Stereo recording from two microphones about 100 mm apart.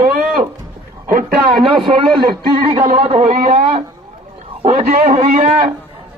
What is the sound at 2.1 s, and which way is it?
Speech, 50° right (ahead or behind).